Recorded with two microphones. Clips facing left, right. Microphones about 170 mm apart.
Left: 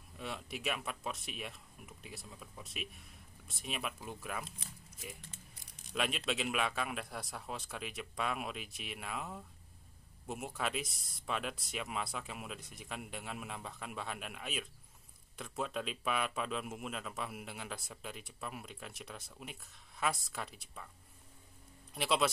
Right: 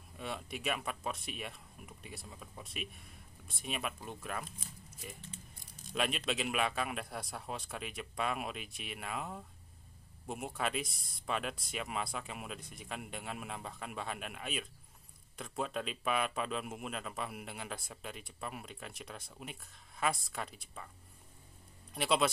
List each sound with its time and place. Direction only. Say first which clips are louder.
0.2 s speech: right 1 dB; centre (ahead or behind)
5.9 s speech: right 1 dB; centre (ahead or behind)
21.9 s speech: right 1 dB; centre (ahead or behind)